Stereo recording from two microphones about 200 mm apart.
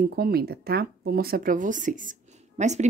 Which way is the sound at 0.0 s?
50° right (ahead or behind).